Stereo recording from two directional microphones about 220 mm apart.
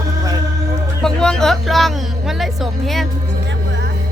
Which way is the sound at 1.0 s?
5° left (ahead or behind).